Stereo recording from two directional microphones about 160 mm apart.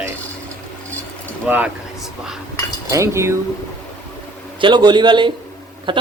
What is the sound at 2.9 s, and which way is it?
Speech, 15° right (ahead or behind).